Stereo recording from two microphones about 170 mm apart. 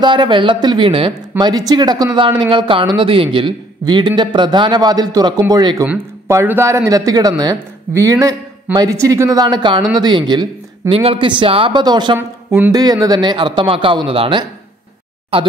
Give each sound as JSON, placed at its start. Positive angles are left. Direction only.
{"t": 0.0, "sound": "a man's voice", "side_deg": -25}
{"t": 1.3, "sound": "speech", "side_deg": -10}
{"t": 1.7, "sound": "a man's voice", "side_deg": -25}
{"t": 6.2, "sound": "a man's voice", "side_deg": -15}
{"t": 12.2, "sound": "a man's voice", "side_deg": -15}